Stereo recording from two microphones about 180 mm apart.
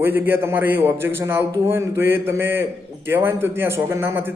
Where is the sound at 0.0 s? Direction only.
10° right (ahead or behind).